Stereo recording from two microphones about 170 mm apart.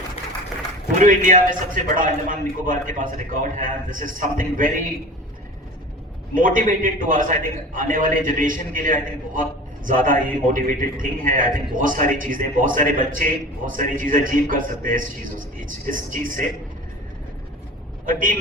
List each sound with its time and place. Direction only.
0.9 s a man's voice: 50° right (ahead or behind)
6.3 s a man's voice: 50° right (ahead or behind)
18.0 s a man's voice: 55° right (ahead or behind)